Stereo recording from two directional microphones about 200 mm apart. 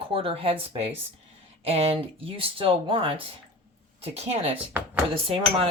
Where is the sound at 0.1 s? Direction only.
25° right (ahead or behind).